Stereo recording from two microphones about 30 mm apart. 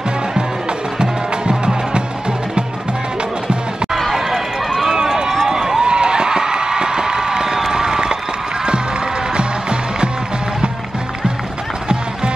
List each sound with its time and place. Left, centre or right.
0.3 s music: right
4.1 s run: centre
7.7 s a sound: right
8.6 s music: right